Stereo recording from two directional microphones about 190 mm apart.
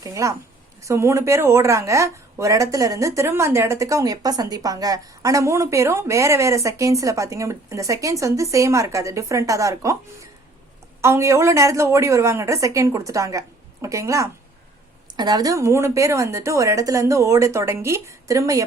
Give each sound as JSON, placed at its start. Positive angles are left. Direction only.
{"t": 0.0, "sound": "speech", "side_deg": -15}
{"t": 11.0, "sound": "speech", "side_deg": -15}